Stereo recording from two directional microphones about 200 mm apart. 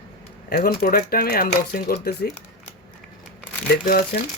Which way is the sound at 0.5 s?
45° left (ahead or behind).